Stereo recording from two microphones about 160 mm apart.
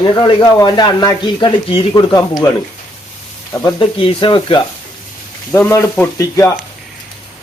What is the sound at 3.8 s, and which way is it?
Speech, 35° left (ahead or behind).